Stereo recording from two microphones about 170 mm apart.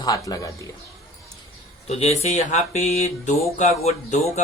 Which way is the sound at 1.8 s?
40° left (ahead or behind).